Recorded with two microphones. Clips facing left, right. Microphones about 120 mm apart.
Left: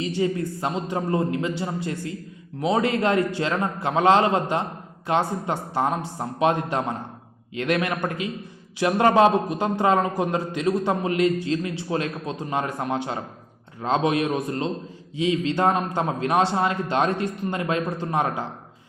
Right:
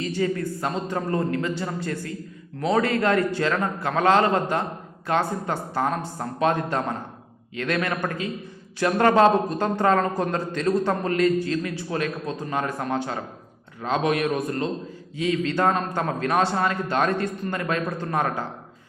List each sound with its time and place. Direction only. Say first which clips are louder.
0.0 s a man's voice: left 1 dB; 20° left (ahead or behind)